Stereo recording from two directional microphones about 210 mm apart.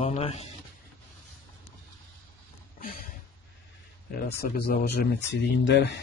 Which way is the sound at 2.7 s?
45° left (ahead or behind).